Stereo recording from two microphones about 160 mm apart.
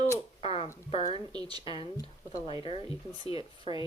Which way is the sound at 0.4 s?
35° left (ahead or behind).